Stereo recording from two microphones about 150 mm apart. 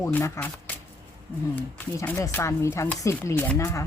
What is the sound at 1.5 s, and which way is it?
Speech, 15° left (ahead or behind).